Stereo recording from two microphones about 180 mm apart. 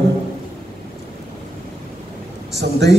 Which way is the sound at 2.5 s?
70° right (ahead or behind).